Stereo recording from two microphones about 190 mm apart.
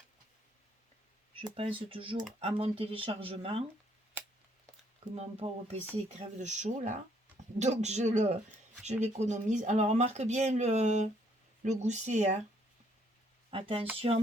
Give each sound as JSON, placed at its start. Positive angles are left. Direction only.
{"t": 1.4, "sound": "speech", "side_deg": -30}
{"t": 5.1, "sound": "speech", "side_deg": -35}
{"t": 13.5, "sound": "speech", "side_deg": -30}